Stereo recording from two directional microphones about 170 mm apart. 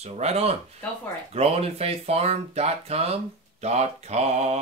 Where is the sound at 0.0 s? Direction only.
40° right (ahead or behind).